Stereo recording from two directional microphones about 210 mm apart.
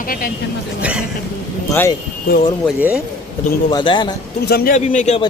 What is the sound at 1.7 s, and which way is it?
Speech, 15° left (ahead or behind).